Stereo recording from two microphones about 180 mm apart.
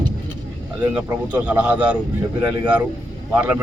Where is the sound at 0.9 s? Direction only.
10° right (ahead or behind).